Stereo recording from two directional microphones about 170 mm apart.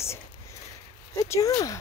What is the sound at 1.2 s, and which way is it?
Speech, 20° left (ahead or behind).